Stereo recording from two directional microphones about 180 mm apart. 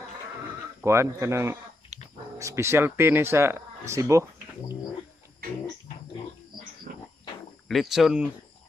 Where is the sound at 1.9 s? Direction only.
40° right (ahead or behind).